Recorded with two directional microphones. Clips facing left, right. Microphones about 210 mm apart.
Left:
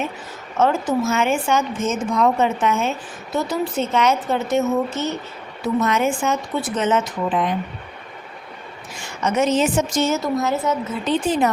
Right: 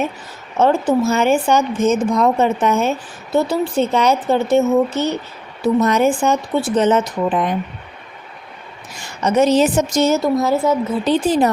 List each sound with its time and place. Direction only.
0.6 s speech: 30° right (ahead or behind)
3.3 s speech: 30° right (ahead or behind)
9.2 s speech: 35° right (ahead or behind)